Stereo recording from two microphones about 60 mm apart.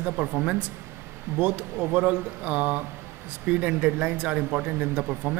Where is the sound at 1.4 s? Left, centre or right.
Right.